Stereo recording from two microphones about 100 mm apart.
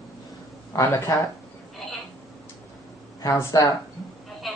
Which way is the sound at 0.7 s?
35° left (ahead or behind).